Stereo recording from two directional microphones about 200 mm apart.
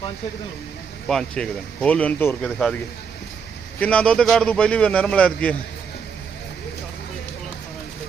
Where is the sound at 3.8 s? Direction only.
5° left (ahead or behind).